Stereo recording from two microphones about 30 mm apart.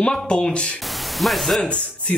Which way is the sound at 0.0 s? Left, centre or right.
Left.